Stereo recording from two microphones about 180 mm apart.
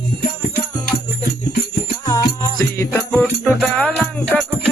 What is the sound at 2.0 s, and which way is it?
Music, 20° left (ahead or behind).